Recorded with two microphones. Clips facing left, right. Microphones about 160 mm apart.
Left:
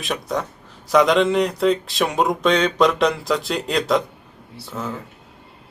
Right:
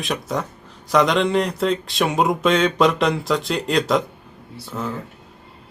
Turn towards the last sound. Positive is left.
turn(degrees=0)  # may be behind; listen again after turning